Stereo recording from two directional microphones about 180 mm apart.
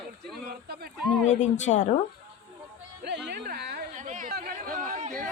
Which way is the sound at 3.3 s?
65° right (ahead or behind).